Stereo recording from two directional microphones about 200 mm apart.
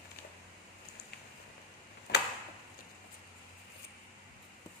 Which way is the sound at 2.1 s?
55° left (ahead or behind).